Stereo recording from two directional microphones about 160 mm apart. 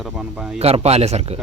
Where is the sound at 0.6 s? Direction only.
40° right (ahead or behind).